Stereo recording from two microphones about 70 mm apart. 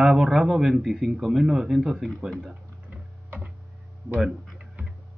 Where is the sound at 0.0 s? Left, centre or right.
Centre.